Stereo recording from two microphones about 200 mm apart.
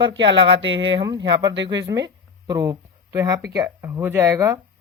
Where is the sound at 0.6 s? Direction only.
65° right (ahead or behind).